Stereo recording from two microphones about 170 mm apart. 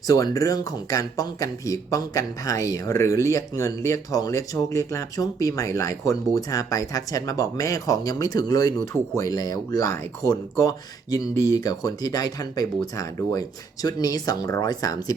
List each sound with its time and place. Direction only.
0.1 s speech: 20° left (ahead or behind)